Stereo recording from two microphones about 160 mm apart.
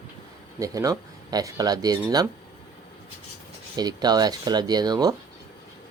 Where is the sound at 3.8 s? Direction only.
25° right (ahead or behind).